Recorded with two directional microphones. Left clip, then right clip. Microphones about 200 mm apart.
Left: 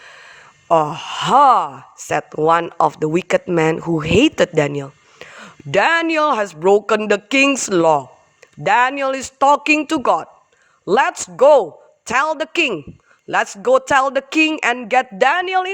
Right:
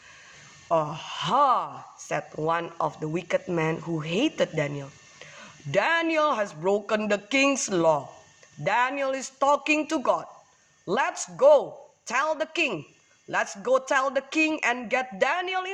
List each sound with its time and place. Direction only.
0.7 s speech: 55° left (ahead or behind)